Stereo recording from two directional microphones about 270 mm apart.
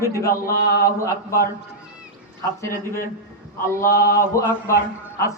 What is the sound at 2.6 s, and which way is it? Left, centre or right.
Speech, centre.